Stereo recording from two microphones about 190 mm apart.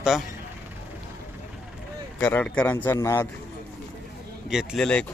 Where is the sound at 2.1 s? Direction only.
5° left (ahead or behind).